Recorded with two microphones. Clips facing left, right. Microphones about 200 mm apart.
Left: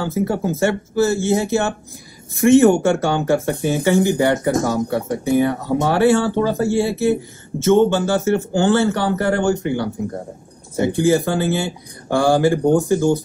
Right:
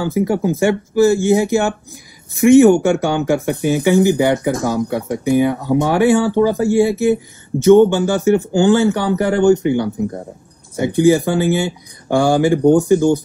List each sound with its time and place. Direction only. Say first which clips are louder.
0.0 s speech: right 3 dB; 15° right (ahead or behind)